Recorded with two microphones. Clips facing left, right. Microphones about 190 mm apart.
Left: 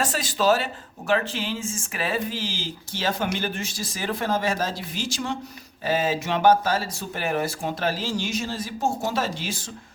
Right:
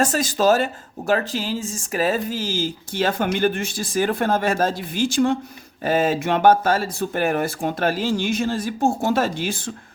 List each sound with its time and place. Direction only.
0.0 s speech: 45° right (ahead or behind)